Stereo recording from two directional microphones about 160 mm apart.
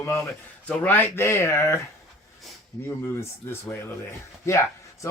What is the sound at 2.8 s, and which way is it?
Speech, 15° left (ahead or behind).